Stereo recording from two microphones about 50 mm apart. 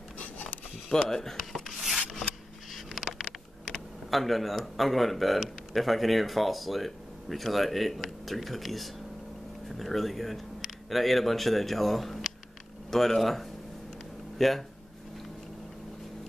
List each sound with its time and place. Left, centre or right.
0.2 s a sound: left
1.0 s shuffling cards: centre
2.7 s vehicle: centre
4.1 s speech: centre